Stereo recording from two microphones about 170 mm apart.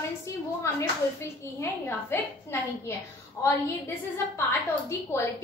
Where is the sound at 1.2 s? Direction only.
15° left (ahead or behind).